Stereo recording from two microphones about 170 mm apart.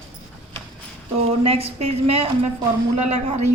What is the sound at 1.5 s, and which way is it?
A woman's voice, 35° right (ahead or behind).